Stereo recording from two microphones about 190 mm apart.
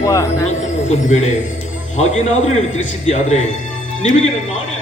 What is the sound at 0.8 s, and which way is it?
A man's voice, 40° left (ahead or behind).